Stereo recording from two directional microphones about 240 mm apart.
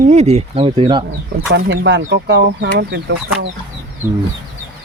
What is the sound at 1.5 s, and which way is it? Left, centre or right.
Speech, right.